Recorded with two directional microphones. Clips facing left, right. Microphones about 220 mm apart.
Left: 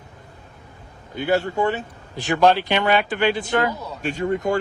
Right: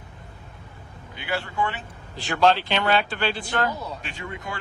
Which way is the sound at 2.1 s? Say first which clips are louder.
Left 3 dB; 15° left (ahead or behind).